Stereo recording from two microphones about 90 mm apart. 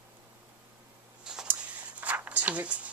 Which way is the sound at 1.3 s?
5° right (ahead or behind).